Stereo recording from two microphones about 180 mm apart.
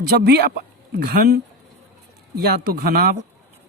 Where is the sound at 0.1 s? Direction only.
60° right (ahead or behind).